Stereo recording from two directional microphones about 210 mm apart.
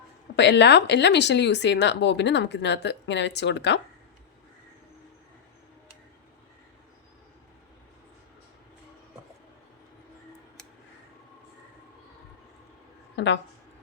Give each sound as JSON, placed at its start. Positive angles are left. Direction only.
{"t": 0.3, "sound": "speech", "side_deg": 55}
{"t": 13.1, "sound": "a woman's voice", "side_deg": 55}